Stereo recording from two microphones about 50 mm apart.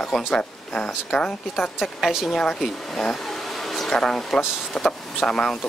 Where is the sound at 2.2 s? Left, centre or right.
Centre.